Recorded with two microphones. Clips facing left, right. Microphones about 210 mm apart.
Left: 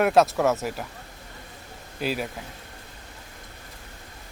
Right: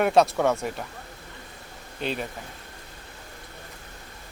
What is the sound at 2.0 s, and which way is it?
Speech, 5° left (ahead or behind).